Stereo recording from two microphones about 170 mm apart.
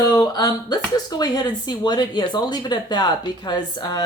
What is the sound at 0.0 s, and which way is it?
Speech, 25° left (ahead or behind).